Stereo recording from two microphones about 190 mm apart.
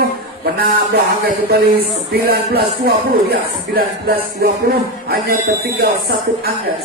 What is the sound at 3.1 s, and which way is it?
Music, 55° right (ahead or behind).